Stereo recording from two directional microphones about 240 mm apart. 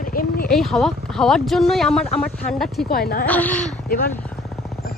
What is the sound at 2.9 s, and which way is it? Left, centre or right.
Speech, left.